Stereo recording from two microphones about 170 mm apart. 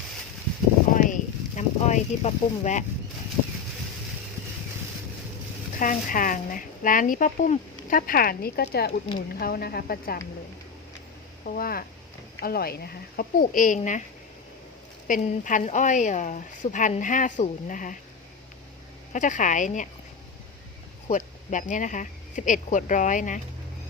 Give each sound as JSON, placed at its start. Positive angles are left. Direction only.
{"t": 0.9, "sound": "a sound", "side_deg": 50}
{"t": 5.8, "sound": "speech", "side_deg": 55}
{"t": 9.1, "sound": "speech", "side_deg": 60}
{"t": 11.4, "sound": "speech", "side_deg": 60}
{"t": 15.0, "sound": "speech", "side_deg": 50}
{"t": 19.1, "sound": "speech", "side_deg": 50}
{"t": 21.1, "sound": "speech", "side_deg": 50}